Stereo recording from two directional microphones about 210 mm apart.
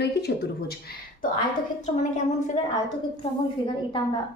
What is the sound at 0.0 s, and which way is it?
A woman's voice, 50° left (ahead or behind).